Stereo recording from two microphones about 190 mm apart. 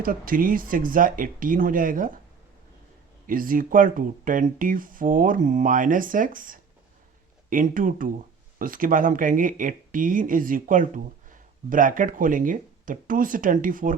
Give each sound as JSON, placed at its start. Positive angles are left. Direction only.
{"t": 0.0, "sound": "speech", "side_deg": -45}
{"t": 3.2, "sound": "speech", "side_deg": -45}